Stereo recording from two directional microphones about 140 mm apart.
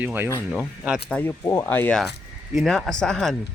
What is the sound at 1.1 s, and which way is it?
Speech, 10° left (ahead or behind).